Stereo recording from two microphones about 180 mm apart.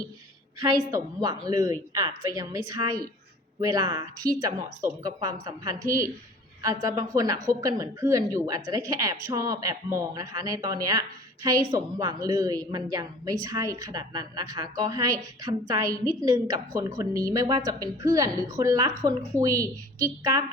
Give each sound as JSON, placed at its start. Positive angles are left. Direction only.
{"t": 0.6, "sound": "a woman's voice", "side_deg": -20}